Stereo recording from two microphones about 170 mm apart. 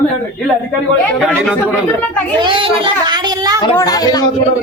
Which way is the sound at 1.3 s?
10° left (ahead or behind).